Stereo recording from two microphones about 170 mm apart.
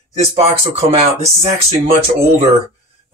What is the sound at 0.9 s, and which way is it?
Speech, 35° right (ahead or behind).